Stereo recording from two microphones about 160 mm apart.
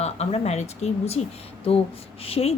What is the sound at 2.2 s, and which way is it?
Speech, 40° left (ahead or behind).